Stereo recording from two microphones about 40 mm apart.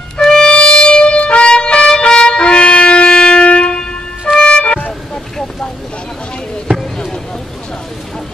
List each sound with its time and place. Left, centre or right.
0.2 s music: centre